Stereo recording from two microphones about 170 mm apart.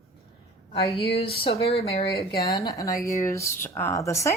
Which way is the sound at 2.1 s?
65° left (ahead or behind).